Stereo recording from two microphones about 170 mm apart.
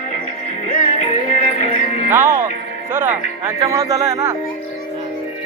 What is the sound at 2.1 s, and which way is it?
Speech, 15° right (ahead or behind).